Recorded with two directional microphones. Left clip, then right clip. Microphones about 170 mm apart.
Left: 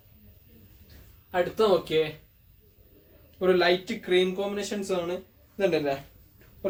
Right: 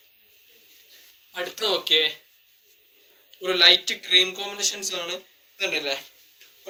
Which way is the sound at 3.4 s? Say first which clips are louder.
Right 5 dB; 20° left (ahead or behind).